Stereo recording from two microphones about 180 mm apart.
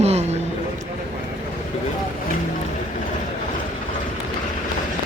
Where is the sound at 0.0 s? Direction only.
35° right (ahead or behind).